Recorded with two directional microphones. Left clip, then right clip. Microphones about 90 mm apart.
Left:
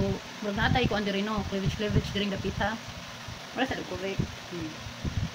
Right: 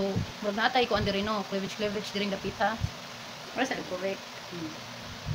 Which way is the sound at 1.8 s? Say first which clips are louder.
Left 1 dB; 35° right (ahead or behind).